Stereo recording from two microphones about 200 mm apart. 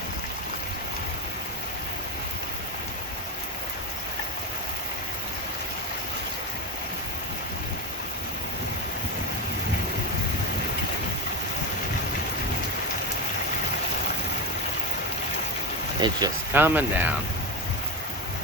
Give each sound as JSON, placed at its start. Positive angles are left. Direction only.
{"t": 16.0, "sound": "speech", "side_deg": -20}
{"t": 16.6, "sound": "speech", "side_deg": -10}